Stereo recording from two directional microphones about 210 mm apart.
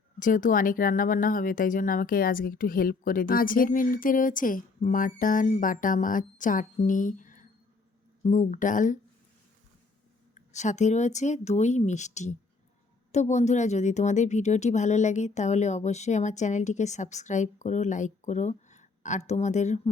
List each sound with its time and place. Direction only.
0.2 s speech: 40° left (ahead or behind)
10.3 s speech: 35° left (ahead or behind)